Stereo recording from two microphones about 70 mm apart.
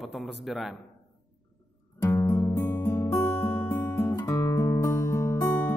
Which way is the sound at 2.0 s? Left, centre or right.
Left.